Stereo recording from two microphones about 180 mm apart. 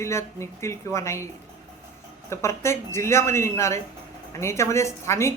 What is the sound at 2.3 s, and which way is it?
A woman's voice, 15° left (ahead or behind).